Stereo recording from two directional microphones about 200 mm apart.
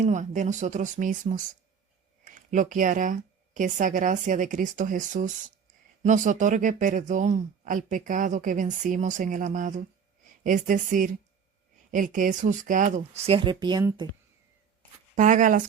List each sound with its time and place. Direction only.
0.0 s speech: 35° right (ahead or behind); by 14.1 s 20° right (ahead or behind)
15.1 s speech: 40° right (ahead or behind)